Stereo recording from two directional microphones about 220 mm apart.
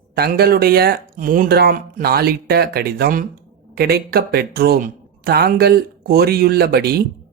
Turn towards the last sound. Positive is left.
turn(degrees=-45)  # may be behind; listen again after turning